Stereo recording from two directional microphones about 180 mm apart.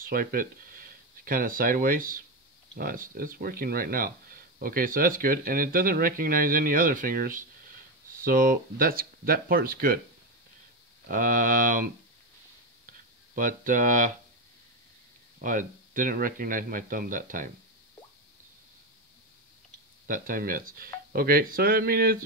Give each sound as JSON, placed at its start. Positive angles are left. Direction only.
{"t": 0.0, "sound": "speech", "side_deg": -50}
{"t": 11.1, "sound": "speech", "side_deg": -50}
{"t": 12.8, "sound": "a sound", "side_deg": -50}
{"t": 15.3, "sound": "speech", "side_deg": -50}
{"t": 20.1, "sound": "speech", "side_deg": -50}